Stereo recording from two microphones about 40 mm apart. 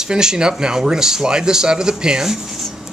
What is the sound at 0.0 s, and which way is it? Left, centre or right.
Speech, centre.